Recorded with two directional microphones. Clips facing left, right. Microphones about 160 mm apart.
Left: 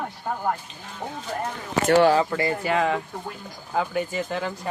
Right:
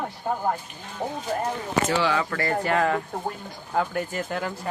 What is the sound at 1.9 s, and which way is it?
Speech, 45° left (ahead or behind).